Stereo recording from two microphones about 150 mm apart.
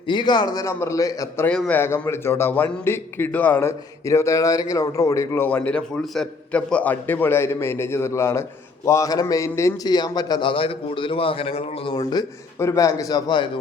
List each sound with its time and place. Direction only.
0.1 s a man's voice: 30° left (ahead or behind)
1.5 s a man's voice: 10° left (ahead or behind); by 13.5 s 30° left (ahead or behind)